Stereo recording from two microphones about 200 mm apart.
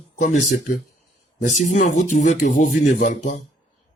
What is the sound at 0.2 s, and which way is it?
Speech, 40° left (ahead or behind).